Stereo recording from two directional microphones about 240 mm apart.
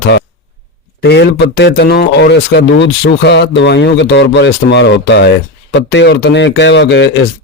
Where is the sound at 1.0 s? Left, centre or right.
Left.